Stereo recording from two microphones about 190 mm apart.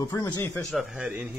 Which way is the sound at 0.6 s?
Centre (ahead or behind).